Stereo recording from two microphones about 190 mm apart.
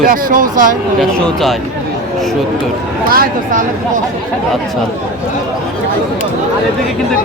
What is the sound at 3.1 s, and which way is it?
Speech, 45° right (ahead or behind).